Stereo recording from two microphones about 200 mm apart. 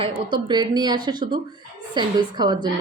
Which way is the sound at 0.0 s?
25° right (ahead or behind).